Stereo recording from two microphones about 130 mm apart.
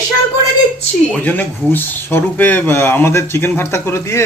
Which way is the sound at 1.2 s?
15° left (ahead or behind).